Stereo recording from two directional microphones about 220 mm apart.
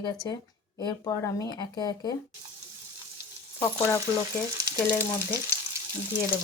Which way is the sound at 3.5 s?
10° left (ahead or behind).